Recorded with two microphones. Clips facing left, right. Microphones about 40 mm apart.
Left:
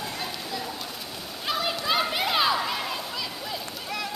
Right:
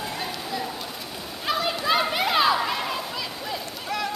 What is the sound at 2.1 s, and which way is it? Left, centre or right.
Children playing, centre.